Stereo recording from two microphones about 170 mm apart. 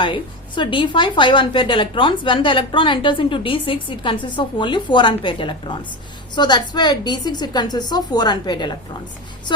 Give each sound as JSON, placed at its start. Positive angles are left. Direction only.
{"t": 0.0, "sound": "a woman's voice", "side_deg": 30}